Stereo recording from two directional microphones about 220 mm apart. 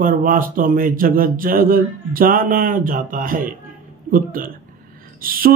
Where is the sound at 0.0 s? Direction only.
40° right (ahead or behind).